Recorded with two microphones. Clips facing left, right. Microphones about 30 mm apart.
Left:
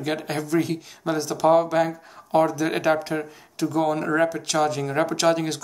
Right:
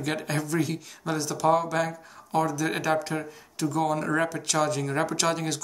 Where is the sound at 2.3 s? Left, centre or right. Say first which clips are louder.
Left 5 dB; left.